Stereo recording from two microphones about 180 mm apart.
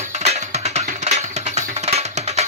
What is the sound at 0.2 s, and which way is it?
Music, 35° right (ahead or behind).